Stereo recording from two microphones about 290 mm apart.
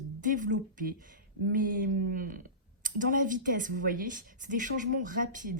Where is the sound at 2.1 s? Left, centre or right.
Right.